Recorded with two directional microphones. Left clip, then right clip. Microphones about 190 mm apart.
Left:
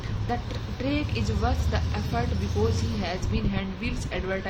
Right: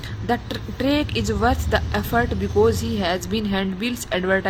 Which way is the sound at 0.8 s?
45° right (ahead or behind).